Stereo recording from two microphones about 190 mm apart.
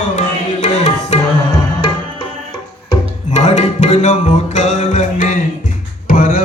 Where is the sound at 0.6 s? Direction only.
35° left (ahead or behind).